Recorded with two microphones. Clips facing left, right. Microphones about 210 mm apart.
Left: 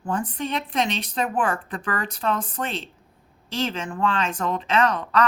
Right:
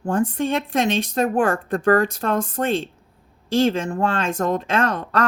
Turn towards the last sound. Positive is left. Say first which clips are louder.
# even
turn(degrees=-45)  # may be behind; listen again after turning